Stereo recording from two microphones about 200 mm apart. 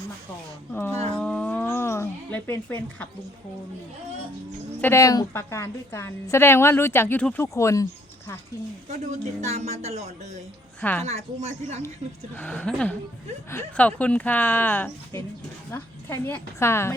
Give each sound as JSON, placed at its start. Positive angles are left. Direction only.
{"t": 0.7, "sound": "a woman's voice", "side_deg": 10}
{"t": 1.1, "sound": "a sound", "side_deg": 5}
{"t": 4.8, "sound": "a woman's voice", "side_deg": 15}
{"t": 9.4, "sound": "speech", "side_deg": -35}
{"t": 10.8, "sound": "a woman's voice", "side_deg": 10}
{"t": 11.0, "sound": "speech", "side_deg": -35}
{"t": 12.4, "sound": "a woman's voice", "side_deg": 5}